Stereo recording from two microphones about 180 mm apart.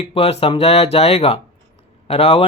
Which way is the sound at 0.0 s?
35° left (ahead or behind).